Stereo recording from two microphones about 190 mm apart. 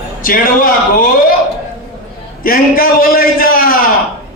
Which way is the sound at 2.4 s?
50° left (ahead or behind).